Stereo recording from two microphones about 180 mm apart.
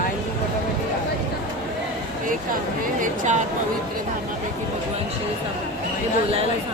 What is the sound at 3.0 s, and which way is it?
Speech, 40° right (ahead or behind).